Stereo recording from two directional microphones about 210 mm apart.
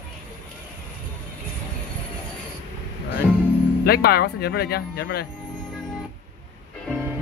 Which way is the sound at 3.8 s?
50° left (ahead or behind).